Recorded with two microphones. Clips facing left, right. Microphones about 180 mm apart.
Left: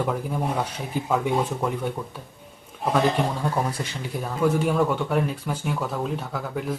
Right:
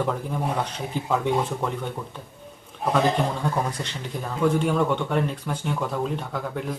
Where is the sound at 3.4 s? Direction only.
10° left (ahead or behind).